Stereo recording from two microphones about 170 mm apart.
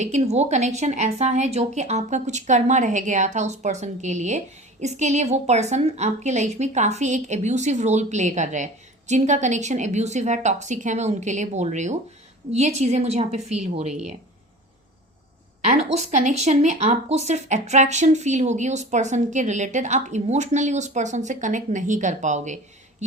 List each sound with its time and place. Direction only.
0.0 s a woman's voice: 40° right (ahead or behind)
15.7 s speech: 45° right (ahead or behind)